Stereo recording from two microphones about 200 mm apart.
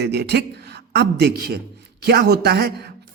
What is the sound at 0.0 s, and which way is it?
Speech, 55° right (ahead or behind).